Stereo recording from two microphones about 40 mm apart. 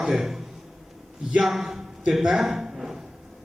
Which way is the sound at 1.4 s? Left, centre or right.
Centre.